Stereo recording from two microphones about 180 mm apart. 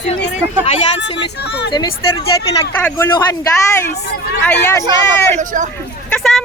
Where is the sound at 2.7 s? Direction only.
10° left (ahead or behind).